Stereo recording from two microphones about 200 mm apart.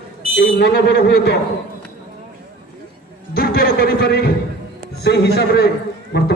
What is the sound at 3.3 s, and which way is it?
A man's voice, 50° left (ahead or behind).